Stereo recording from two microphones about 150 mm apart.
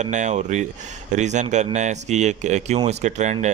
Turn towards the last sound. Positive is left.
turn(degrees=-50)  # may be behind; listen again after turning